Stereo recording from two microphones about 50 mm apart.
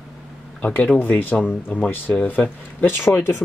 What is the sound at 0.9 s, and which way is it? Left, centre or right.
Speech, left.